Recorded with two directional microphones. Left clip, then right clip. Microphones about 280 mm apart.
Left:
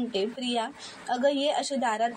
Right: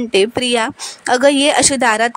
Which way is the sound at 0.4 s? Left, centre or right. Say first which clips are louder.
Right 14 dB; right.